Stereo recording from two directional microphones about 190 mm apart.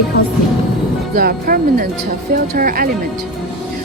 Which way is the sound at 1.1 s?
50° right (ahead or behind).